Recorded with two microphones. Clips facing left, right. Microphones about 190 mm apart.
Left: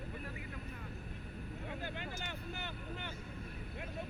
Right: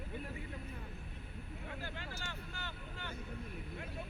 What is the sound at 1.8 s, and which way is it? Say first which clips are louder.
Vehicle: left 3 dB; 20° left (ahead or behind).